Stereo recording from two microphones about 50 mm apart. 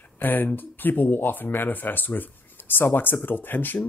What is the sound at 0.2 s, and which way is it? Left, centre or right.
Speech, left.